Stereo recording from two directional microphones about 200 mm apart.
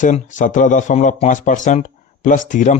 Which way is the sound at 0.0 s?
40° left (ahead or behind).